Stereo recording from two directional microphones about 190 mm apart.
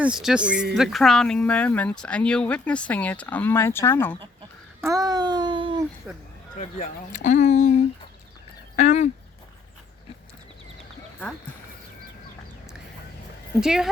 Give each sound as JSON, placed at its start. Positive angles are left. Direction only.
{"t": 0.0, "sound": "speech", "side_deg": -5}
{"t": 4.8, "sound": "a child's voice", "side_deg": -15}
{"t": 6.1, "sound": "speech", "side_deg": -5}
{"t": 6.6, "sound": "speech", "side_deg": 40}
{"t": 13.6, "sound": "speech", "side_deg": -5}